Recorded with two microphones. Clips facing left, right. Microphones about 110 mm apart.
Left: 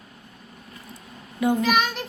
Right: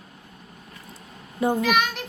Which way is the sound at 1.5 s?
10° right (ahead or behind).